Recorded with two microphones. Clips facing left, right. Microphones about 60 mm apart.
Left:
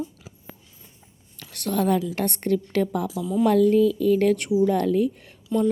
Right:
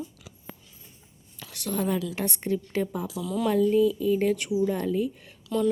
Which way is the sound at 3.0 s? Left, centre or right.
Left.